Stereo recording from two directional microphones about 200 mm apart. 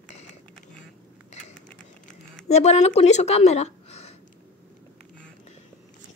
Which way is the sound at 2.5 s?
35° left (ahead or behind).